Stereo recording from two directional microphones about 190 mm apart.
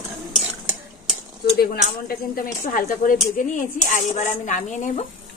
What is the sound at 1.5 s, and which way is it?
Speech, 50° left (ahead or behind).